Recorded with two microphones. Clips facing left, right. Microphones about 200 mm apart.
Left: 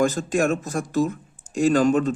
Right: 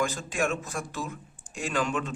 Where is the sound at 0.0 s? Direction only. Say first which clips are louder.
Left 8 dB; 45° left (ahead or behind).